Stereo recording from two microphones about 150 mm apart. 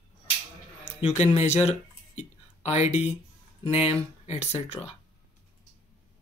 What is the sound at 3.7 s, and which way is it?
Speech, 45° left (ahead or behind).